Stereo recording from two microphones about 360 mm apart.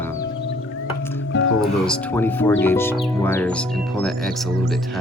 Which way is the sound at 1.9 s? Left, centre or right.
Centre.